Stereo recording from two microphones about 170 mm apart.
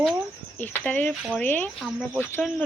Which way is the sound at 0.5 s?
10° left (ahead or behind).